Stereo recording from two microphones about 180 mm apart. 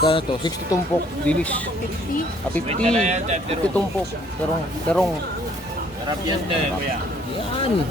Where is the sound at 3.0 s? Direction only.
40° right (ahead or behind).